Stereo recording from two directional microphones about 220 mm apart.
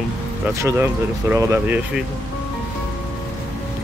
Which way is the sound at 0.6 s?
10° right (ahead or behind).